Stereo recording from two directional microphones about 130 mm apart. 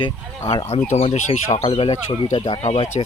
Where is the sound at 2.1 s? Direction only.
65° left (ahead or behind).